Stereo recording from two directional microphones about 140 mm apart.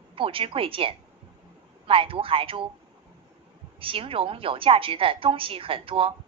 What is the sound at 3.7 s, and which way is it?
A woman's voice, 40° right (ahead or behind).